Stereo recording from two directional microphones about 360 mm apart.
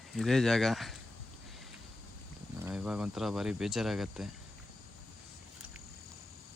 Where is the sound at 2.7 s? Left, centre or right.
Centre.